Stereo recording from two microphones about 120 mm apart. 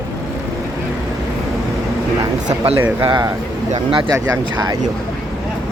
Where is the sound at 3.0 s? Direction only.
40° right (ahead or behind).